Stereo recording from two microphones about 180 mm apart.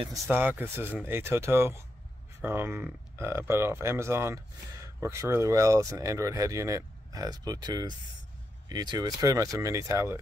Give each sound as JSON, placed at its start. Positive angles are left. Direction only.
{"t": 0.3, "sound": "speech", "side_deg": -10}